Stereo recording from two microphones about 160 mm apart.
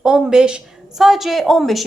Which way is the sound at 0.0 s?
5° right (ahead or behind).